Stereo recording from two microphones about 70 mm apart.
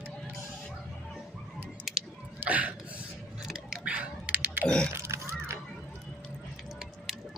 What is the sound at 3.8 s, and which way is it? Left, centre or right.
Typing, centre.